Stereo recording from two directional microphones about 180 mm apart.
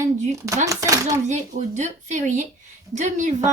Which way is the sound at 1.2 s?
40° right (ahead or behind).